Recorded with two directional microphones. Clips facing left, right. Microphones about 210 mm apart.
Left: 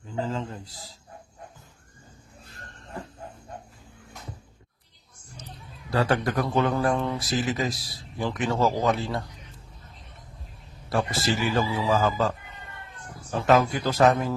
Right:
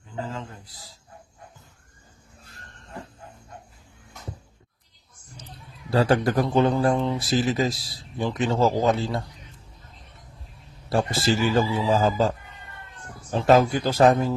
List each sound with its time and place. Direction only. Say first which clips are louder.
0.3 s a man's voice: left 4 dB; 35° left (ahead or behind)
5.9 s speech: right 4 dB; 30° right (ahead or behind)
10.8 s speech: right 3 dB; 30° right (ahead or behind)
13.3 s speech: right 3 dB; 30° right (ahead or behind)